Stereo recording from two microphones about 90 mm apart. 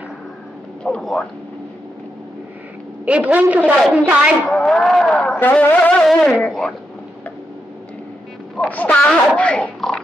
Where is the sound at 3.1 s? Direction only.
15° right (ahead or behind).